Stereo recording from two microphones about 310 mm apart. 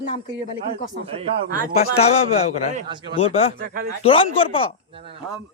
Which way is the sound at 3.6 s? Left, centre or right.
Right.